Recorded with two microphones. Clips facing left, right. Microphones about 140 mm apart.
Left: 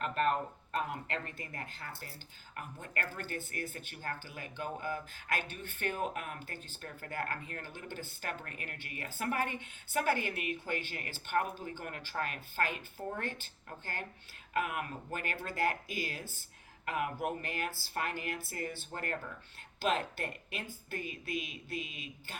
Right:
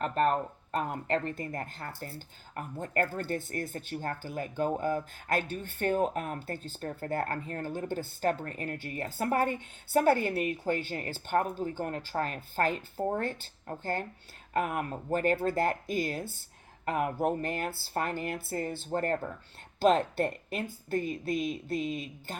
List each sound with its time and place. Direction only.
0.0 s speech: 35° right (ahead or behind)
21.4 s speech: 40° right (ahead or behind)